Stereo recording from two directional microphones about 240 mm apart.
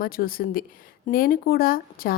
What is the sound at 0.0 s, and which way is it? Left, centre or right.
A woman's voice, left.